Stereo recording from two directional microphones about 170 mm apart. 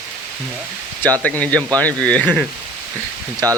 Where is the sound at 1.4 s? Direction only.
5° left (ahead or behind).